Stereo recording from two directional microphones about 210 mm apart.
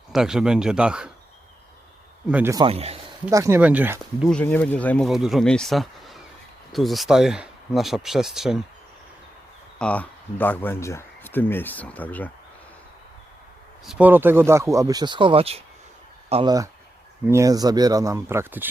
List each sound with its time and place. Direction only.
0.1 s speech: 5° right (ahead or behind)
2.3 s speech: 15° right (ahead or behind)
2.6 s speech: 30° right (ahead or behind)
3.2 s speech: 15° right (ahead or behind)
4.3 s speech: 5° left (ahead or behind)
9.7 s speech: 5° left (ahead or behind)
13.8 s speech: 10° right (ahead or behind)